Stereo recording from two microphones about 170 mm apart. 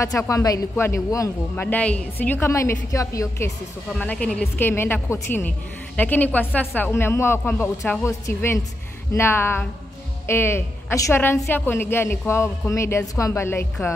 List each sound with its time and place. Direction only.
0.3 s a man's voice: 20° left (ahead or behind)
3.9 s a man's voice: 5° left (ahead or behind)